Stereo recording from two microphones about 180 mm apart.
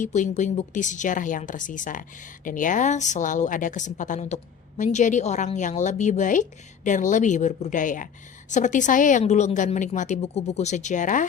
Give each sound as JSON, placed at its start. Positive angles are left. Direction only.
{"t": 0.0, "sound": "a woman's voice", "side_deg": 40}